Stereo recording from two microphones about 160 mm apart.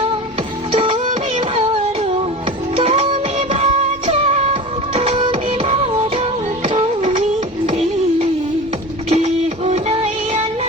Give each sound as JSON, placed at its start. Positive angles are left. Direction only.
{"t": 0.7, "sound": "music", "side_deg": -35}
{"t": 7.7, "sound": "a sound", "side_deg": -40}
{"t": 9.0, "sound": "music", "side_deg": -40}